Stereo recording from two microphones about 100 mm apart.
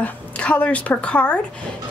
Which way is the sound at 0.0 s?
10° left (ahead or behind).